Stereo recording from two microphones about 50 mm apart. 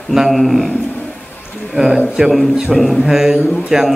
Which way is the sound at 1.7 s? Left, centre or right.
Centre.